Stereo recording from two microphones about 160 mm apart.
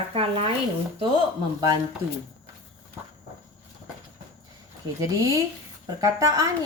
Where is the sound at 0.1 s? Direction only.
35° right (ahead or behind).